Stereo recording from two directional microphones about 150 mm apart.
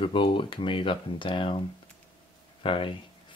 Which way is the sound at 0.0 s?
35° left (ahead or behind).